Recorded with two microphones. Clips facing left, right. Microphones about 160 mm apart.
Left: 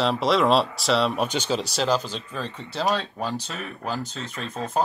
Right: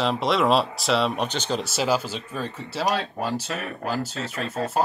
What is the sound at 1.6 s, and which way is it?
Speech, 5° right (ahead or behind).